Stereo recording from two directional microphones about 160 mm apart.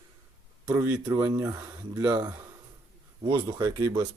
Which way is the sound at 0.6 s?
20° right (ahead or behind).